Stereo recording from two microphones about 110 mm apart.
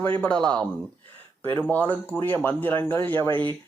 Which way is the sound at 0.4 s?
10° left (ahead or behind).